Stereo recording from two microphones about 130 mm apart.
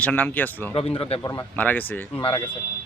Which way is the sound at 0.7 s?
45° left (ahead or behind).